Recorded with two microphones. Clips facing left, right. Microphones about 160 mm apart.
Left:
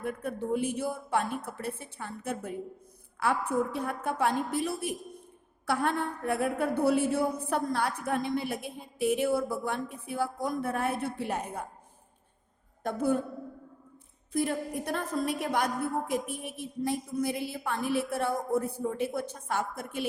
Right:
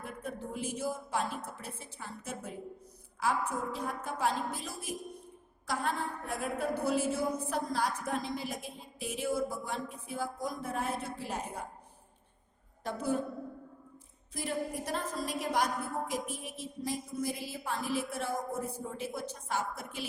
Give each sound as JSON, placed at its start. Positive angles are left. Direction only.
{"t": 0.0, "sound": "a woman's voice", "side_deg": 60}
{"t": 12.8, "sound": "a woman's voice", "side_deg": 55}
{"t": 14.3, "sound": "a woman's voice", "side_deg": 55}